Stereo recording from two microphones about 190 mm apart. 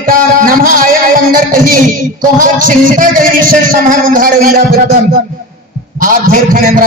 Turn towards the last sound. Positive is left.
turn(degrees=-45)  # may be behind; listen again after turning